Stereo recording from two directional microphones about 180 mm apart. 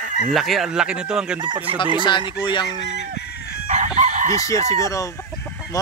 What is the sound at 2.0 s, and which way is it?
Speech, 25° left (ahead or behind).